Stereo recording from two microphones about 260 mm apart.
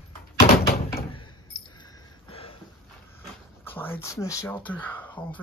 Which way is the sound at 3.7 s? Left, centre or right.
Centre.